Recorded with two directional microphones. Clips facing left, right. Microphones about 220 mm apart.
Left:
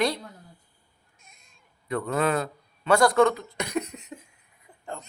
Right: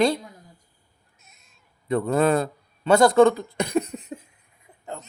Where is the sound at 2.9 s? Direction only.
25° right (ahead or behind).